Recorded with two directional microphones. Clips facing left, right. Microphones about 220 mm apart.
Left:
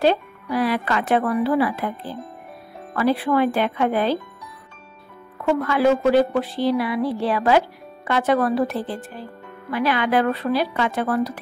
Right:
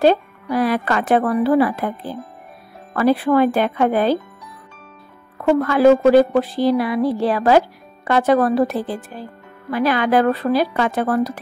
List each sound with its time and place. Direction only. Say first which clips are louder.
0.0 s speech: right 4 dB; 45° right (ahead or behind)
5.4 s a woman's voice: right 5 dB; 40° right (ahead or behind)